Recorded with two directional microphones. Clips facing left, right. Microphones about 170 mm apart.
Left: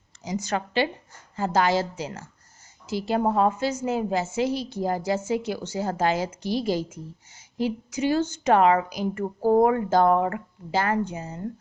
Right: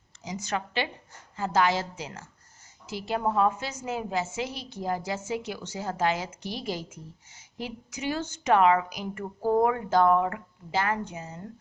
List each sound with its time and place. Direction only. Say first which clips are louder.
0.3 s a woman's voice: left 4 dB; 40° left (ahead or behind)